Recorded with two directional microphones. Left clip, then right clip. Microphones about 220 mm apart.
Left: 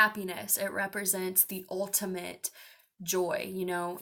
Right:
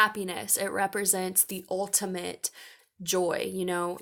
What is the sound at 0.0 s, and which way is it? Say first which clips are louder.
Speech: right 1 dB; 45° right (ahead or behind).